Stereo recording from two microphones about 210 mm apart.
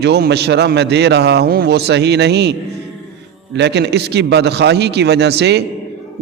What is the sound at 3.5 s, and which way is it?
A man's voice, 55° right (ahead or behind).